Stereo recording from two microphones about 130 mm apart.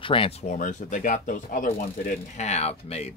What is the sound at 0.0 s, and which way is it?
Speech, 45° left (ahead or behind).